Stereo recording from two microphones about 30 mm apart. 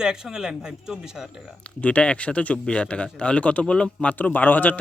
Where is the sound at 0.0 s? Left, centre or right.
Right.